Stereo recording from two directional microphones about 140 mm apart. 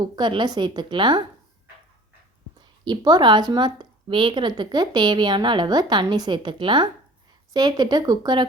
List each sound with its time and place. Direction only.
0.0 s speech: 35° right (ahead or behind)
2.6 s speech: 30° right (ahead or behind)